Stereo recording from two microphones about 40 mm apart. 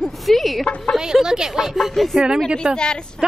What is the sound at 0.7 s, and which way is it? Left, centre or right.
Speech, left.